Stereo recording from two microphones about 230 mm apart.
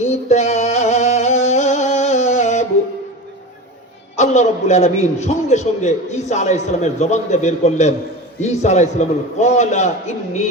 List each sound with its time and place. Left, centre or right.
0.0 s music: left
4.2 s a man's voice: left